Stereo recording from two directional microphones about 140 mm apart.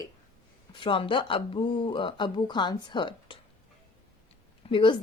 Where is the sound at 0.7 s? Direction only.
35° left (ahead or behind).